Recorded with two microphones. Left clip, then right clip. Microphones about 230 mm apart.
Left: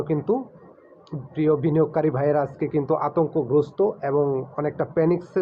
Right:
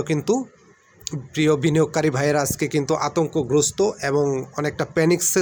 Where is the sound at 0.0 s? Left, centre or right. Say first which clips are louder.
Right 2 dB; right.